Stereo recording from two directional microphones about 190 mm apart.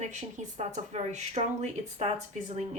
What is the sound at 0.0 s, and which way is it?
Speech, 40° right (ahead or behind).